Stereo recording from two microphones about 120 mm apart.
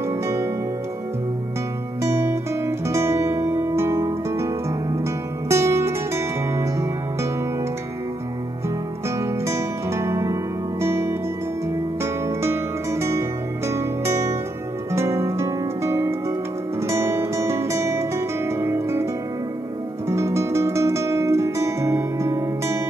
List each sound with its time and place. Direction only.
2.2 s music: 25° right (ahead or behind)
5.5 s music: 20° right (ahead or behind)
9.2 s music: 25° right (ahead or behind)
13.7 s music: 25° right (ahead or behind)
20.1 s music: 25° right (ahead or behind)